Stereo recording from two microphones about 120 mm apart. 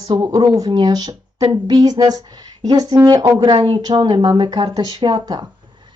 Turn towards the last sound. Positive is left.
turn(degrees=-40)  # may be behind; listen again after turning